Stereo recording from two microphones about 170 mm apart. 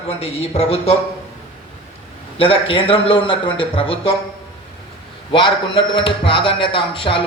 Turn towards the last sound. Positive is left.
turn(degrees=30)  # may be behind; listen again after turning